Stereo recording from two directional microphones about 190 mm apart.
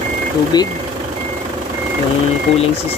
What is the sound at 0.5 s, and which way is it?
Speech, 20° left (ahead or behind).